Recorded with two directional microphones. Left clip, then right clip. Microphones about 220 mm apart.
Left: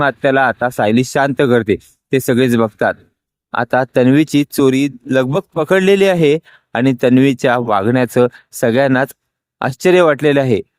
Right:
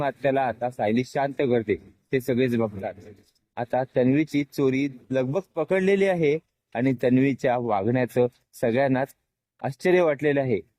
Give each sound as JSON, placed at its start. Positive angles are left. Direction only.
{"t": 0.0, "sound": "a man's voice", "side_deg": 30}